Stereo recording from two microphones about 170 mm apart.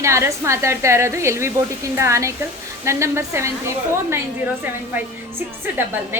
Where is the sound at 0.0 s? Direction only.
15° right (ahead or behind).